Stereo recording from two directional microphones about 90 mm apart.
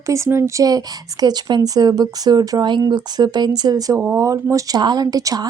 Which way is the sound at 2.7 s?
55° right (ahead or behind).